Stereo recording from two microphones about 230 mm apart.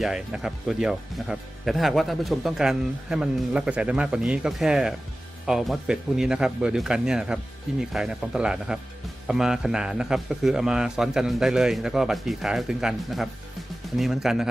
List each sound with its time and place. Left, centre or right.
0.0 s speech: centre